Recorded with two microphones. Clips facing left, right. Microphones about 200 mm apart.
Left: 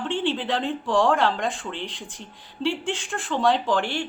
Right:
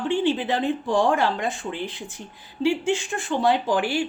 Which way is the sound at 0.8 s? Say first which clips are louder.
Left 1 dB; 90° left.